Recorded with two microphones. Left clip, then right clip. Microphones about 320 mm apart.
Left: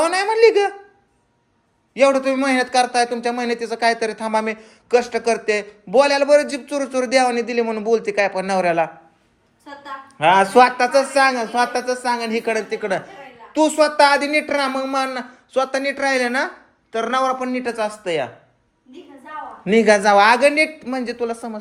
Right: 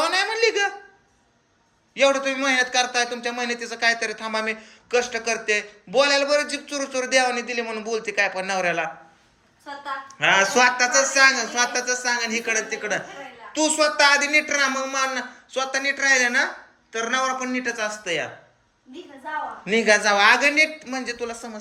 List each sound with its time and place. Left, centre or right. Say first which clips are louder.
0.0 s a sound: left 6 dB; centre
1.9 s a man's voice: left 4 dB; centre
10.2 s a man's voice: left 5 dB; centre
19.6 s a man's voice: left 5 dB; centre